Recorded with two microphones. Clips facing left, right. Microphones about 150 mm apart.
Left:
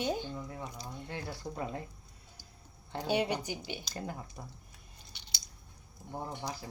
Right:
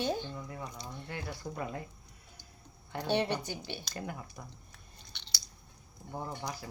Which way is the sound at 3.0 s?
10° left (ahead or behind).